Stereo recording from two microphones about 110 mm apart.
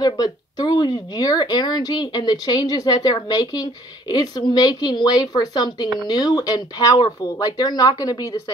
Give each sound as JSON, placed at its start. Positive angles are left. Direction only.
{"t": 0.0, "sound": "speech", "side_deg": 35}